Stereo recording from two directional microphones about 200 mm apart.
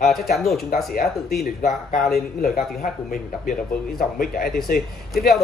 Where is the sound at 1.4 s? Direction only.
45° left (ahead or behind).